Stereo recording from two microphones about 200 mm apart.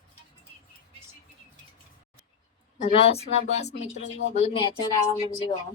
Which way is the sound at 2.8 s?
30° left (ahead or behind).